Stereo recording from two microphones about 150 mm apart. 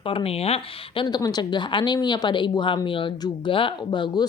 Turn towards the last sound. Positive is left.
turn(degrees=30)  # may be behind; listen again after turning